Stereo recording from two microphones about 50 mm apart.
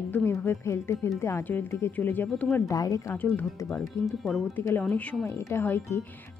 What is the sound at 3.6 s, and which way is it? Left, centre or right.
Speech, left.